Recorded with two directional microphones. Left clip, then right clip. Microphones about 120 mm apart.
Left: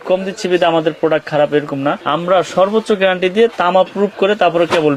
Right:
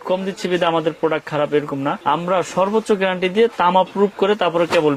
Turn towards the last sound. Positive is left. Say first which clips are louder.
# left 4 dB
turn(degrees=-40)  # may be behind; listen again after turning